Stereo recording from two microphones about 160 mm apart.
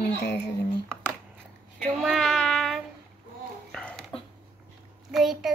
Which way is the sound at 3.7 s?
5° left (ahead or behind).